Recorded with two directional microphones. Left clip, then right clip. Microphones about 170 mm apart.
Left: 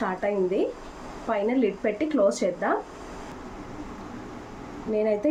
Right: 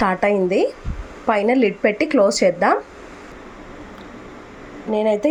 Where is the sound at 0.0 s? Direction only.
40° right (ahead or behind).